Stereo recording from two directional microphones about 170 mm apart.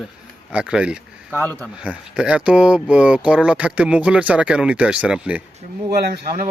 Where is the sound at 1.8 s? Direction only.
5° right (ahead or behind).